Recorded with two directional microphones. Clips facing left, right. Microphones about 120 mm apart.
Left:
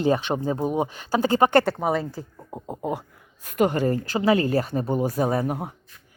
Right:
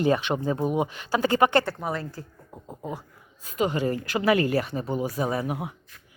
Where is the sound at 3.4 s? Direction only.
55° left (ahead or behind).